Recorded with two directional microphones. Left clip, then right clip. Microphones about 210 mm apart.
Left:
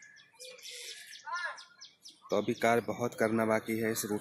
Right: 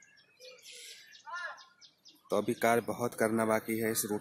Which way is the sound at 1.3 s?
20° left (ahead or behind).